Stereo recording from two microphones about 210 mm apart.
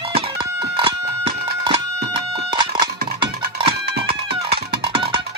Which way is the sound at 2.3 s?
25° right (ahead or behind).